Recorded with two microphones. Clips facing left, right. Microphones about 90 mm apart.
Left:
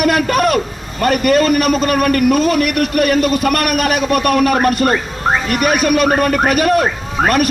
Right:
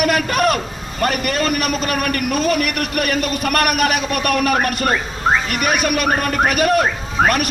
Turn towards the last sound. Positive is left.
turn(degrees=40)  # may be behind; listen again after turning